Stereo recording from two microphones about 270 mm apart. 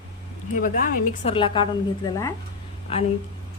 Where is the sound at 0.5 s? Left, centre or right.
Left.